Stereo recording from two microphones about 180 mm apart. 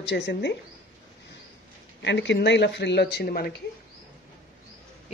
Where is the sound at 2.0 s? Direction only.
75° left (ahead or behind); by 3.5 s 60° left (ahead or behind).